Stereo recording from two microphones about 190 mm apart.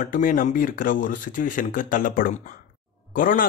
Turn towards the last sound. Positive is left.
turn(degrees=45)  # may be behind; listen again after turning